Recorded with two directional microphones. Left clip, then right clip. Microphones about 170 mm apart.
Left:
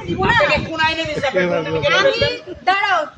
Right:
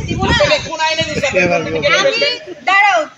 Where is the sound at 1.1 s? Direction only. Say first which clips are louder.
Right 4 dB; 20° right (ahead or behind).